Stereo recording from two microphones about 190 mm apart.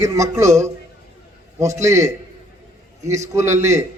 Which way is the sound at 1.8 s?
15° right (ahead or behind).